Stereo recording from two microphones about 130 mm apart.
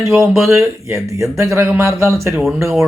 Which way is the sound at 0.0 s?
20° right (ahead or behind).